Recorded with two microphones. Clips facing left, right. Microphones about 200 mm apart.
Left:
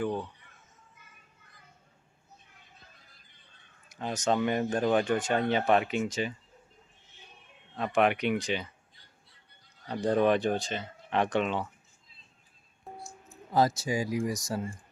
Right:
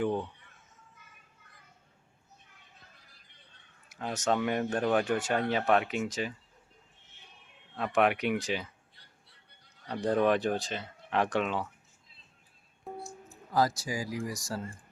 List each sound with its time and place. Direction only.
3.8 s speech: 5° right (ahead or behind)
7.8 s speech: centre (ahead or behind)
9.8 s speech: centre (ahead or behind)
13.5 s speech: 25° left (ahead or behind)